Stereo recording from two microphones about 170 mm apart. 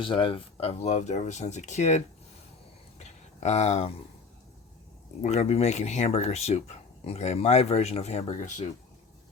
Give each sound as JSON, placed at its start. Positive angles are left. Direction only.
{"t": 0.0, "sound": "speech", "side_deg": 30}
{"t": 3.0, "sound": "a sound", "side_deg": 40}
{"t": 5.2, "sound": "speech", "side_deg": 40}